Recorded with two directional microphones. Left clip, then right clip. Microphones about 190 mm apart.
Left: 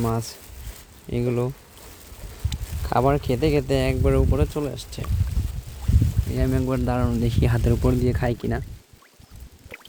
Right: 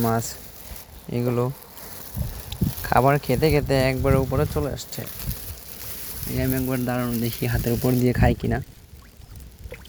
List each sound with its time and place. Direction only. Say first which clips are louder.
0.0 s speech: right 3 dB; 5° left (ahead or behind)
1.1 s speech: right 1 dB; 15° left (ahead or behind)
2.8 s speech: right 2 dB; 5° left (ahead or behind)
6.3 s speech: even; 15° left (ahead or behind)
8.0 s speech: right 3 dB; centre (ahead or behind)